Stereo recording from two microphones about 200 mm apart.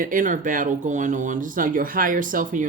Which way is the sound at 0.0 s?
40° right (ahead or behind).